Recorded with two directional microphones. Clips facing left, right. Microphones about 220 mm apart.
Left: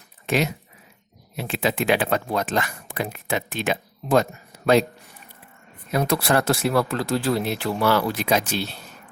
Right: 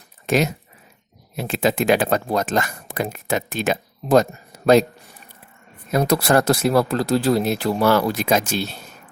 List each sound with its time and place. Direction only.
0.3 s speech: 45° right (ahead or behind)
5.9 s speech: 40° right (ahead or behind)